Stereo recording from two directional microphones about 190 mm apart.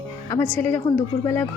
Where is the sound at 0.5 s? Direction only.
10° left (ahead or behind).